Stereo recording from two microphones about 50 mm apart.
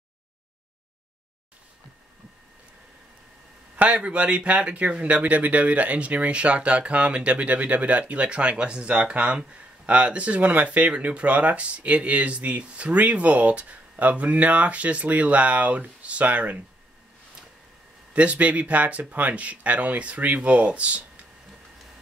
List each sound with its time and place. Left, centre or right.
3.7 s speech: right
18.1 s speech: right